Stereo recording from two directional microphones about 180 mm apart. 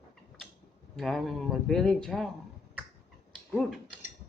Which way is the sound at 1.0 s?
Centre (ahead or behind).